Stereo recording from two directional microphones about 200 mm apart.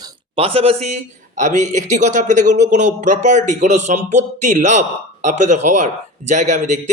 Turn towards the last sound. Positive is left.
turn(degrees=-35)  # may be behind; listen again after turning